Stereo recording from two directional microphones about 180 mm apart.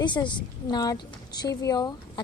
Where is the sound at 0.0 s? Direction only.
25° left (ahead or behind).